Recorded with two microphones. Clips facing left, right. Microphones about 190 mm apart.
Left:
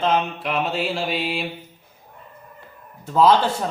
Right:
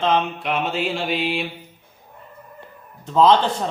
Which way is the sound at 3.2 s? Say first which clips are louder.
Right 1 dB; 5° left (ahead or behind).